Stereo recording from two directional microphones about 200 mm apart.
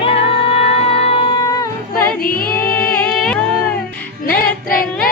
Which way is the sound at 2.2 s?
50° left (ahead or behind).